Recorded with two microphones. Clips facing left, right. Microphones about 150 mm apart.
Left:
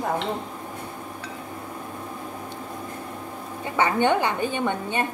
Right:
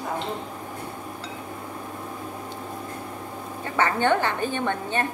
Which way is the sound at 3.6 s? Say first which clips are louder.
Left 1 dB; 15° left (ahead or behind).